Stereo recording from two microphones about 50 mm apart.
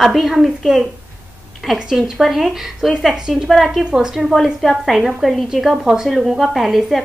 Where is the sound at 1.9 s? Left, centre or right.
Centre.